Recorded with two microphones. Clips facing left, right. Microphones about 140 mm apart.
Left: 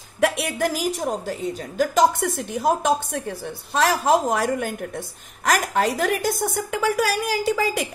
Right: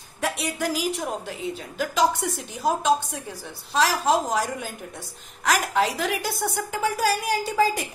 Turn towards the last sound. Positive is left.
turn(degrees=80)